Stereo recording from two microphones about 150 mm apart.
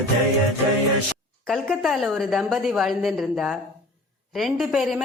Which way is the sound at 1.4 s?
Centre (ahead or behind).